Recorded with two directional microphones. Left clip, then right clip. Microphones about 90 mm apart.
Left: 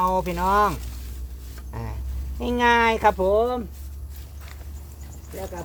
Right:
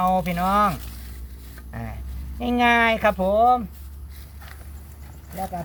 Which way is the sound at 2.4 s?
55° left (ahead or behind).